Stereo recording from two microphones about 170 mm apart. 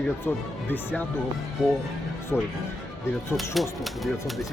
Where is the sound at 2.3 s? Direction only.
10° left (ahead or behind).